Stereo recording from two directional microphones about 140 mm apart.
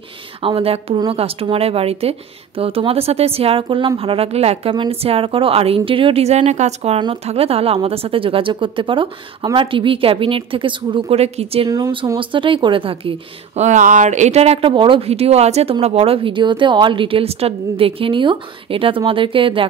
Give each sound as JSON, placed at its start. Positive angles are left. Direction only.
{"t": 0.4, "sound": "speech", "side_deg": -40}
{"t": 11.7, "sound": "speech", "side_deg": -30}
{"t": 13.6, "sound": "speech", "side_deg": -60}